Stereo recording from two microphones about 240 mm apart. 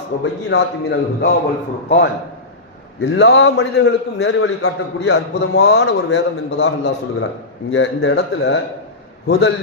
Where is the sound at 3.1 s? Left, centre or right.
Left.